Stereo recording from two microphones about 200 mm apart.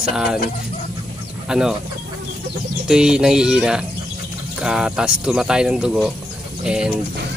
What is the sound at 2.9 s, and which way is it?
Speech, 5° right (ahead or behind).